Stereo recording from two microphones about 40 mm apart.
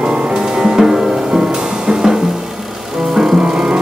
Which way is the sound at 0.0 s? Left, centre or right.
Right.